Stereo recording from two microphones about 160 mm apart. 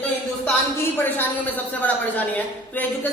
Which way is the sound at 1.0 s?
10° left (ahead or behind).